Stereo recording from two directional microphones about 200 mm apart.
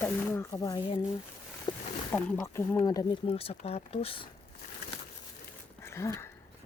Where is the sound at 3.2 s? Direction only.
30° left (ahead or behind).